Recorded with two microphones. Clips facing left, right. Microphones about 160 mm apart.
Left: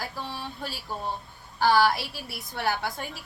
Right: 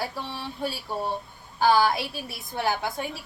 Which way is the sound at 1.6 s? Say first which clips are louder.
Right 1 dB; 15° right (ahead or behind).